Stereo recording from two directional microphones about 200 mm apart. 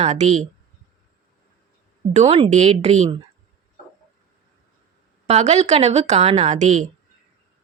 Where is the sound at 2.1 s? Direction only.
30° right (ahead or behind).